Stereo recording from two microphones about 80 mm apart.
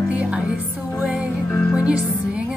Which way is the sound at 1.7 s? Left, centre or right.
Centre.